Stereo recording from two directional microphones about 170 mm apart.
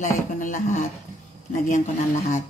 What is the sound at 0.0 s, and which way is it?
Speech, 45° left (ahead or behind).